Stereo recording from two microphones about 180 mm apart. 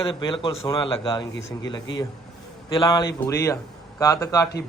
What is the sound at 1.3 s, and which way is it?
Speech, 90° left.